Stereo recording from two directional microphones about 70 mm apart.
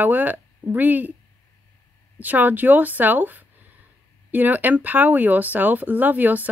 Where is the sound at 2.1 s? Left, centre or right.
Right.